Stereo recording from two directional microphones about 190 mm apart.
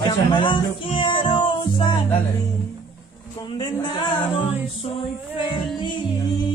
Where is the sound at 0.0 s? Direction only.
25° left (ahead or behind).